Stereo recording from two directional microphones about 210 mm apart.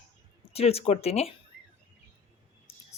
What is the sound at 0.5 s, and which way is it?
Speech, 30° left (ahead or behind).